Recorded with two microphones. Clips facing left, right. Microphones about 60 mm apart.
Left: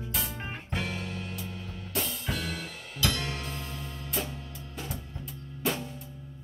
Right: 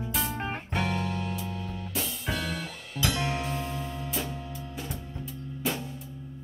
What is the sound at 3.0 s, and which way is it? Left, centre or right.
Music, right.